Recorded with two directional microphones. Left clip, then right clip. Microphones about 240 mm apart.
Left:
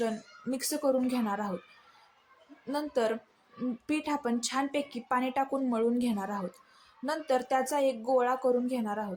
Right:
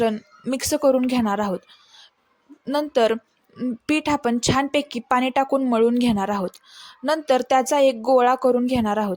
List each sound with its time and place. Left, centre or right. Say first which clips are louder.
0.0 s a woman's voice: right 10 dB; right
2.6 s a woman's voice: right 11 dB; right